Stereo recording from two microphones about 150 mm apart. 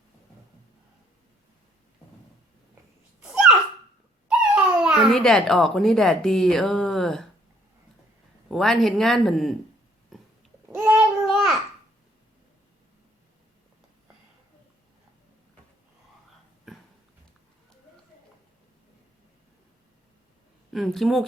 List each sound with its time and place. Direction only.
4.3 s speech: 5° right (ahead or behind)
8.4 s speech: centre (ahead or behind)
10.1 s pig: centre (ahead or behind)
10.7 s child singing: 15° right (ahead or behind)
11.3 s babbling: centre (ahead or behind)
20.7 s speech: centre (ahead or behind)